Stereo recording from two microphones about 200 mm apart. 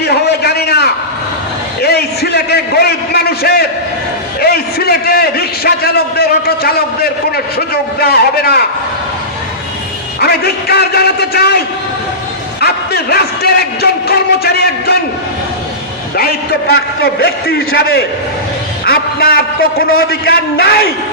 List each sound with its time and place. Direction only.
0.0 s a sound: 55° left (ahead or behind)
4.4 s a man's voice: 50° left (ahead or behind)
10.2 s a man's voice: 50° left (ahead or behind)
16.1 s a man's voice: 50° left (ahead or behind)